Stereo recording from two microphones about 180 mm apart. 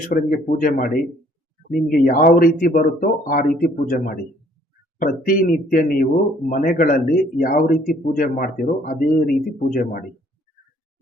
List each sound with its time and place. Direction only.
0.1 s speech: 50° left (ahead or behind)
2.0 s speech: 45° left (ahead or behind)